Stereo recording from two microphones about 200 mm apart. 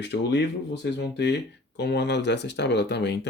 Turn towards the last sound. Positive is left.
turn(degrees=55)  # may be behind; listen again after turning